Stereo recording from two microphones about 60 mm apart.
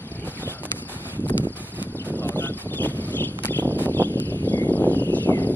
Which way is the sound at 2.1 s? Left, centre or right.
Left.